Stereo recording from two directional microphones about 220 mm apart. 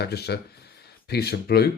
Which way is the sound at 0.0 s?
45° left (ahead or behind).